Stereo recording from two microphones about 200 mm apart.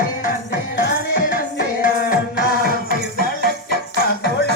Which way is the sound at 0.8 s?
55° left (ahead or behind).